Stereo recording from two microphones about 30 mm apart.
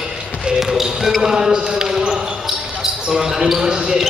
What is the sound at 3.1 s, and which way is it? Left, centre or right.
Basketball bounce, centre.